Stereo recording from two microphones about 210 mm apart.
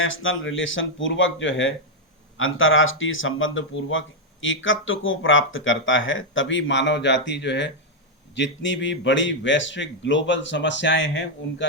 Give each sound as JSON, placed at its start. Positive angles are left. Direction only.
{"t": 0.0, "sound": "speech", "side_deg": 70}